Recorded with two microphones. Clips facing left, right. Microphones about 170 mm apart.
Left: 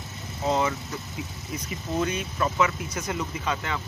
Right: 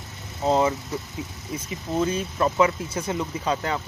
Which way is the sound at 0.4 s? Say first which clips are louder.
Right 4 dB; 30° right (ahead or behind).